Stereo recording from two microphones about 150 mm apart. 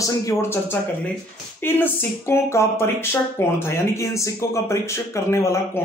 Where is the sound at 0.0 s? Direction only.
20° left (ahead or behind).